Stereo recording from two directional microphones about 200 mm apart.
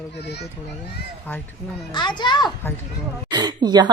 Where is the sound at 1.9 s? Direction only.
20° left (ahead or behind).